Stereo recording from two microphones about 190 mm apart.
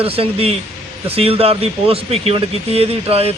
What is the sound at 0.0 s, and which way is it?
A man's voice, 30° right (ahead or behind).